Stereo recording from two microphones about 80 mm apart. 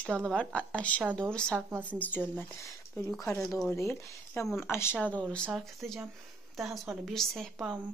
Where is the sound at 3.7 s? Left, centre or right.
Left.